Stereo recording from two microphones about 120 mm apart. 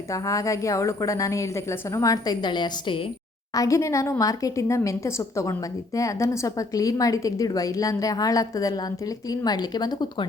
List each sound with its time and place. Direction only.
0.1 s a woman's voice: 25° left (ahead or behind)
3.5 s a woman's voice: 25° left (ahead or behind)